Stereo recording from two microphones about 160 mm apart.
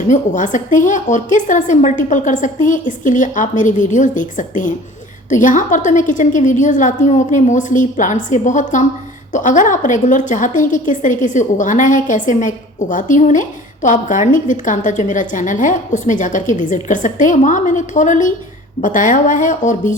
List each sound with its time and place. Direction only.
0.1 s a woman's voice: 50° left (ahead or behind)